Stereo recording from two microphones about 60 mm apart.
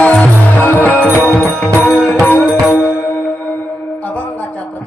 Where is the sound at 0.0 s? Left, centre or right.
Left.